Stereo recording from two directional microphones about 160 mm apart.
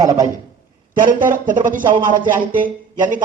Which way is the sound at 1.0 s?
60° right (ahead or behind).